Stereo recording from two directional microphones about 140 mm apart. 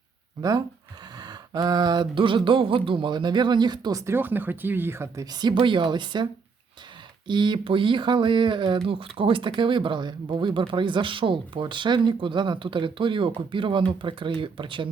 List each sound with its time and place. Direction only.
1.2 s speech: 30° right (ahead or behind)
7.3 s speech: 35° right (ahead or behind)